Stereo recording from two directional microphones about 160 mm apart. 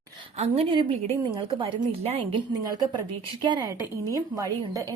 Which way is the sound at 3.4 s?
25° right (ahead or behind).